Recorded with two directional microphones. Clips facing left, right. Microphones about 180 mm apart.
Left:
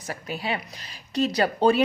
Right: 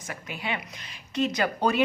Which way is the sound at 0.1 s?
35° left (ahead or behind).